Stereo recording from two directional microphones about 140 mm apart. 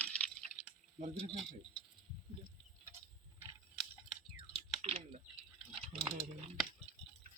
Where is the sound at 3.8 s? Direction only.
Centre (ahead or behind).